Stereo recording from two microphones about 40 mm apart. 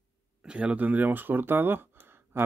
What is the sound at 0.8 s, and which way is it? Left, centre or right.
Speech, right.